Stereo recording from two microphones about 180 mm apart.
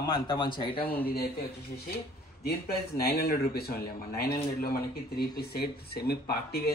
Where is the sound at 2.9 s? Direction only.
55° left (ahead or behind).